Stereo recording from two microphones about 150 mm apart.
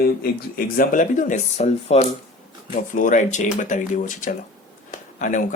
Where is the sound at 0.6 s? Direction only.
65° left (ahead or behind); by 2.0 s 45° left (ahead or behind).